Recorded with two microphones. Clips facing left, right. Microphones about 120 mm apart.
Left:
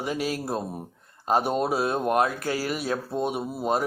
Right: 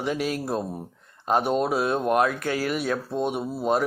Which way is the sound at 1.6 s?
35° left (ahead or behind).